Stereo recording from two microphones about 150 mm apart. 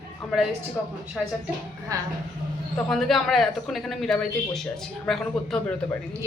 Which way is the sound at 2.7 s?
Centre (ahead or behind).